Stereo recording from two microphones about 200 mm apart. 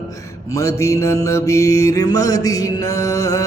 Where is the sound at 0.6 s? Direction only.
15° left (ahead or behind).